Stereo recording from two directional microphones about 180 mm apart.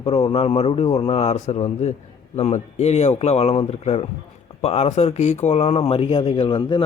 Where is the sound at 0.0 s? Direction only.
35° left (ahead or behind).